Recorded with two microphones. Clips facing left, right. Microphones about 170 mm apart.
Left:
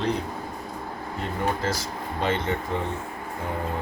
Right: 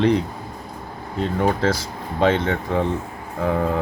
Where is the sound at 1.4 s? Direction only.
85° right.